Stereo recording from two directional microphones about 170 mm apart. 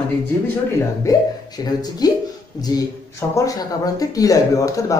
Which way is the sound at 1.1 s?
20° left (ahead or behind).